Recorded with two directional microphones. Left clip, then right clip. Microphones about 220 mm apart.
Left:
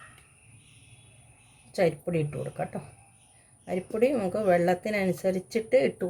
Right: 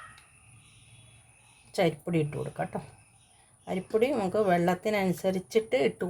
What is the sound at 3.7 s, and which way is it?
Speech, 40° right (ahead or behind).